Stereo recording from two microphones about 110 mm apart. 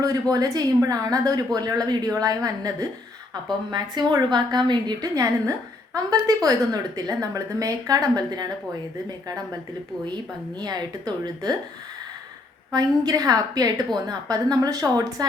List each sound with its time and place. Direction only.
0.0 s a woman's voice: 35° right (ahead or behind)
10.6 s a woman's voice: 40° right (ahead or behind)
12.7 s a woman's voice: 35° right (ahead or behind)